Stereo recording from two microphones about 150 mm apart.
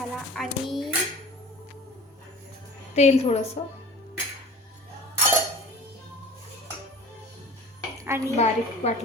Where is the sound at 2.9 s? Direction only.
45° left (ahead or behind).